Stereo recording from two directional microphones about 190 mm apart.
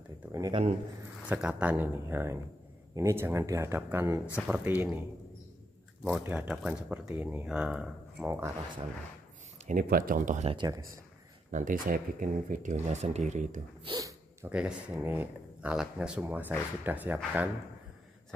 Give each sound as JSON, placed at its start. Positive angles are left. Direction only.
{"t": 0.3, "sound": "a sound", "side_deg": -20}
{"t": 1.3, "sound": "speech", "side_deg": -5}
{"t": 6.1, "sound": "speech", "side_deg": -5}
{"t": 9.7, "sound": "speech", "side_deg": -50}
{"t": 10.5, "sound": "speech", "side_deg": -25}
{"t": 11.5, "sound": "speech", "side_deg": -45}
{"t": 13.9, "sound": "dog", "side_deg": -15}
{"t": 14.5, "sound": "speech", "side_deg": -10}